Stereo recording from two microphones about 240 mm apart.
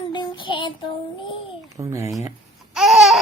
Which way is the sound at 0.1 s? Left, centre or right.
Centre.